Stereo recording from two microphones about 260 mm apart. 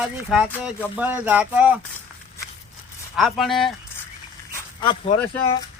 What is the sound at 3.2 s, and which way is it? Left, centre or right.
Speech, centre.